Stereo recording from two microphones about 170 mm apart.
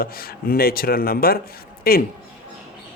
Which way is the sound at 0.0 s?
60° left (ahead or behind).